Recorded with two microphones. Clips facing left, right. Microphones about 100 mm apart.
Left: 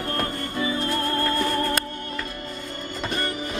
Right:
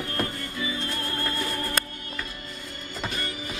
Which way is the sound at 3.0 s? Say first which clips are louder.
Left 5 dB; 45° left (ahead or behind).